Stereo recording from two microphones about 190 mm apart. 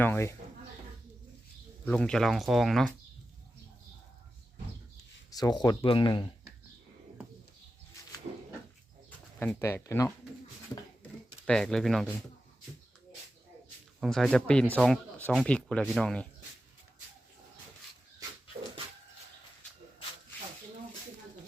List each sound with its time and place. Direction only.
0.0 s speech: 10° left (ahead or behind)
1.8 s speech: 5° left (ahead or behind)
5.3 s speech: 20° left (ahead or behind)
8.3 s a sound: 35° right (ahead or behind)
9.0 s speech: 10° left (ahead or behind)
11.4 s speech: 5° left (ahead or behind)
14.0 s speech: centre (ahead or behind)